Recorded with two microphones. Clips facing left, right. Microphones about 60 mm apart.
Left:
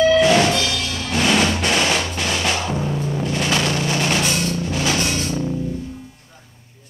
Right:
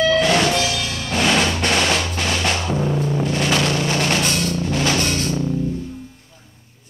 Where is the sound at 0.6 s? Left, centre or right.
Centre.